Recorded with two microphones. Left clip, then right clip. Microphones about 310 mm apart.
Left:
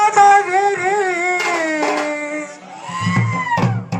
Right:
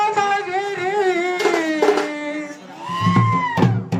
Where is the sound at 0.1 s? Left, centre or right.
Left.